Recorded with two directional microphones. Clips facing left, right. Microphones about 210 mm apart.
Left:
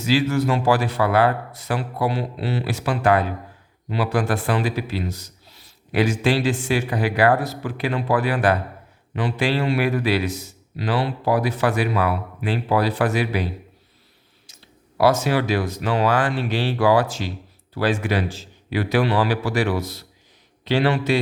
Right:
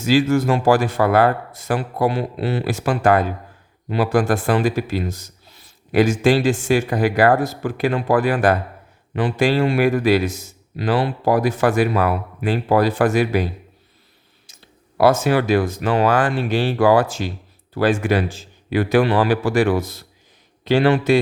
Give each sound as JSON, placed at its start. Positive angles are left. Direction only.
{"t": 0.0, "sound": "speech", "side_deg": -45}